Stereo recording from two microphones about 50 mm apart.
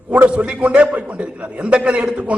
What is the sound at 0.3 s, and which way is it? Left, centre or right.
A man's voice, right.